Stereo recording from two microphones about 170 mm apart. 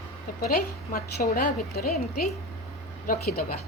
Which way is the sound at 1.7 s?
65° left (ahead or behind).